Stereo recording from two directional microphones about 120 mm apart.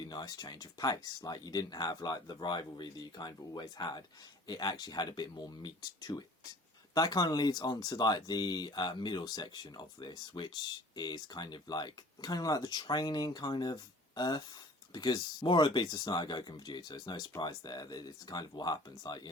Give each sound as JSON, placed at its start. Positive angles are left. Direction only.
{"t": 0.0, "sound": "speech", "side_deg": 35}